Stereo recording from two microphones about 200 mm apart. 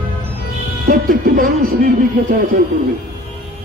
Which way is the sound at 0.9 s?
45° right (ahead or behind).